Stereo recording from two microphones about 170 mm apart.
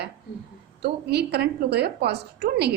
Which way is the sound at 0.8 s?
70° right (ahead or behind).